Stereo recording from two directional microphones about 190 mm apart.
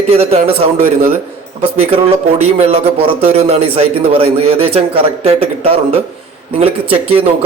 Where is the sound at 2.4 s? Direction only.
35° right (ahead or behind).